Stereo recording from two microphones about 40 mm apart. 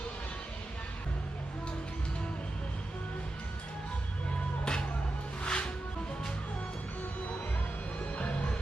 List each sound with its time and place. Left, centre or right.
4.6 s music: left
8.1 s music: left